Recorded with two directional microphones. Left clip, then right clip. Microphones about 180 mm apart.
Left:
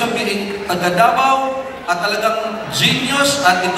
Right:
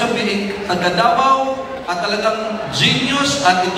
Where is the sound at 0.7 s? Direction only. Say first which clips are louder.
Left 1 dB; 35° left (ahead or behind).